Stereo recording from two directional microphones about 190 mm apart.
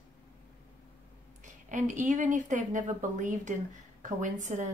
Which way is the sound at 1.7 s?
40° right (ahead or behind).